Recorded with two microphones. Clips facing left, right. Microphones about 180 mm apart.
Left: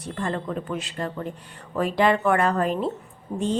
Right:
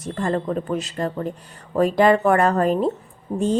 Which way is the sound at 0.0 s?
40° right (ahead or behind).